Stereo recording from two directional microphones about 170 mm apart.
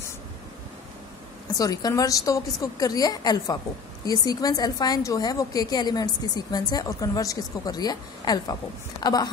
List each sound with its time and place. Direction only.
1.5 s a woman's voice: 20° left (ahead or behind)